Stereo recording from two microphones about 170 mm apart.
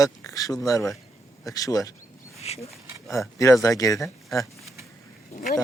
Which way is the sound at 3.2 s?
20° left (ahead or behind).